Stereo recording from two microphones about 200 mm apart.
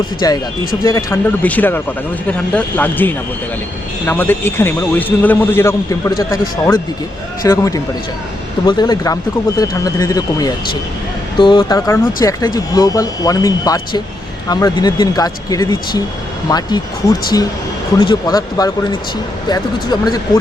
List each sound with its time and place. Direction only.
0.2 s speech: 20° left (ahead or behind)
7.4 s speech: 15° left (ahead or behind)
18.0 s speech: 20° left (ahead or behind)